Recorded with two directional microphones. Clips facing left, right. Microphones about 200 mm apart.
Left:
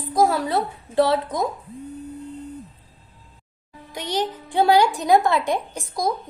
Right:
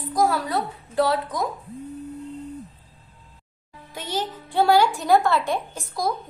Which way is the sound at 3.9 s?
15° left (ahead or behind).